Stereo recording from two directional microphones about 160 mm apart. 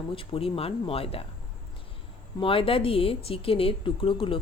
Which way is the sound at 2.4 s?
35° left (ahead or behind).